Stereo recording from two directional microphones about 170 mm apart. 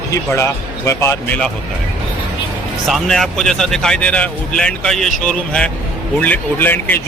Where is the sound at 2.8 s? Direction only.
Centre (ahead or behind).